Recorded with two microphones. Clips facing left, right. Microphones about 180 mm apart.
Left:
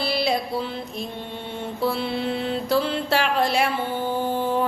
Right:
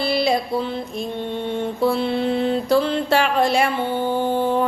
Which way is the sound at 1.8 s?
5° left (ahead or behind).